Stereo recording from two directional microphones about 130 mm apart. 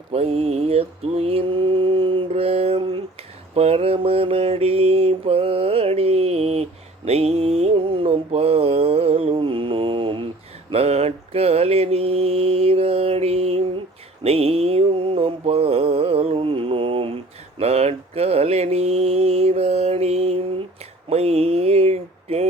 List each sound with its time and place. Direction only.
0.1 s mantra: 50° right (ahead or behind)
10.7 s mantra: 50° right (ahead or behind)
21.1 s a sound: 55° right (ahead or behind)